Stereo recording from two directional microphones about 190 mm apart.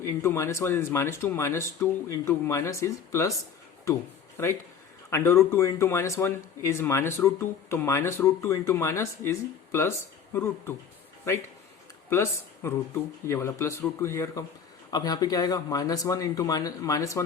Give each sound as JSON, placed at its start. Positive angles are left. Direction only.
{"t": 0.0, "sound": "speech", "side_deg": 15}
{"t": 4.4, "sound": "speech", "side_deg": 15}
{"t": 10.3, "sound": "speech", "side_deg": 10}
{"t": 12.1, "sound": "speech", "side_deg": 15}